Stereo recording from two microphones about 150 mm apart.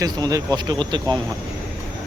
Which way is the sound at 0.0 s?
25° right (ahead or behind).